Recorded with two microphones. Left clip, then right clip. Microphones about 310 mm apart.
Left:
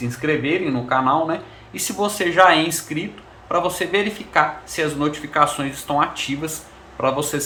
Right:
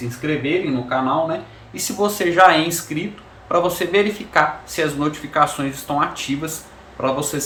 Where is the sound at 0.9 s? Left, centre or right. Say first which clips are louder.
Left 3 dB; centre.